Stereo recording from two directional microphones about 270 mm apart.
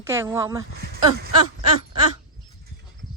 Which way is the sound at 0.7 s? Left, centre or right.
Right.